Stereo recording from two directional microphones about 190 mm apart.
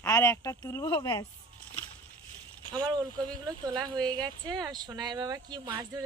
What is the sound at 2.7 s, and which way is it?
Speech, 20° right (ahead or behind).